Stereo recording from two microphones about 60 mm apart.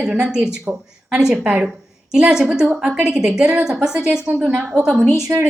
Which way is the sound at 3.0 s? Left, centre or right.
Right.